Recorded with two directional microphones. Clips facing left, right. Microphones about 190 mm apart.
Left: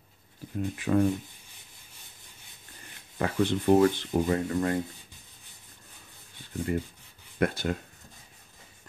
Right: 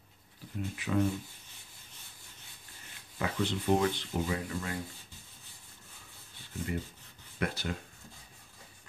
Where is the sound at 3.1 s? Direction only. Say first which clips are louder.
Left 6 dB; 50° left (ahead or behind).